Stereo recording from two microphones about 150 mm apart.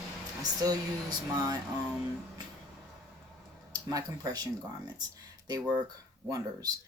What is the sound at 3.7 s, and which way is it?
Speech, 25° right (ahead or behind).